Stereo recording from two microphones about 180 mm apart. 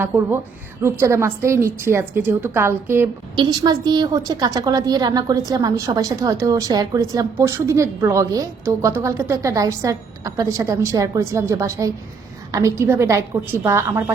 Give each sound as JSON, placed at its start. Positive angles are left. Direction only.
{"t": 0.8, "sound": "a woman's voice", "side_deg": -15}
{"t": 3.3, "sound": "a woman's voice", "side_deg": -25}